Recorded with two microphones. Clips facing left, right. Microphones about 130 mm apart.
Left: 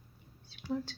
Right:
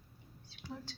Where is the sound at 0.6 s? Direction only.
60° left (ahead or behind).